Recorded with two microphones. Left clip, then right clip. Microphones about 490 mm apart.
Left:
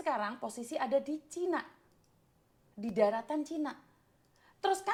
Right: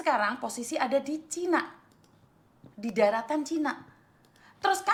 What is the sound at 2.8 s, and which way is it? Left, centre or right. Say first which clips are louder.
A woman's voice: right 5 dB; left.